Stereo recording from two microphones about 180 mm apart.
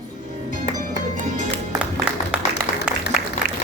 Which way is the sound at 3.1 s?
5° right (ahead or behind).